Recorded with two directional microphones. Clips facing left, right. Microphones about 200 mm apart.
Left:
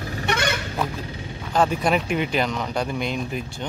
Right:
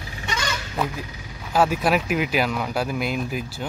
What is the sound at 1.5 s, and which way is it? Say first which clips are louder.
Speech: right 1 dB; 5° right (ahead or behind).